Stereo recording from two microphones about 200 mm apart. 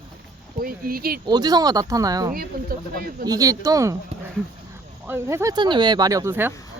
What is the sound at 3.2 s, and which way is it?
Speech, 15° right (ahead or behind).